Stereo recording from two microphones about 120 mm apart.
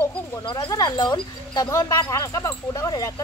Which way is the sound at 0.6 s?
30° left (ahead or behind).